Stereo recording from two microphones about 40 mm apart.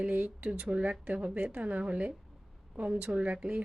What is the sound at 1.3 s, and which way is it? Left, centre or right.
A woman's voice, right.